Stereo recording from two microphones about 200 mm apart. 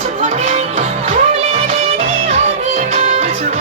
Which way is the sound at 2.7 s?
35° right (ahead or behind).